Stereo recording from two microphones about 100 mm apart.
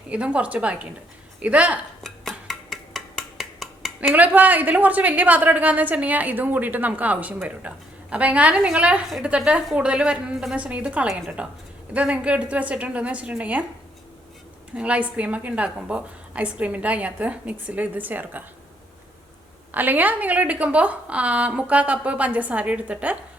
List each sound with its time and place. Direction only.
0.1 s a woman's voice: 10° right (ahead or behind)
2.0 s a sound: 5° left (ahead or behind)
4.1 s a woman's voice: 15° right (ahead or behind)
14.8 s a woman's voice: 10° right (ahead or behind)
19.7 s a woman's voice: 20° right (ahead or behind)